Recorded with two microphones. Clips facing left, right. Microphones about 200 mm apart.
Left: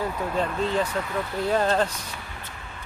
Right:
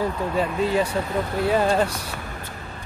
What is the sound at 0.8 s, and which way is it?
Speech, 35° right (ahead or behind).